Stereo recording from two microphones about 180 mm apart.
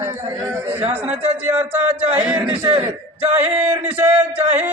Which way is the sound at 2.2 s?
10° right (ahead or behind).